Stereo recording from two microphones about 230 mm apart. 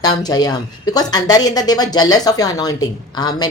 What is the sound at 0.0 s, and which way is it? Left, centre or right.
Speech, centre.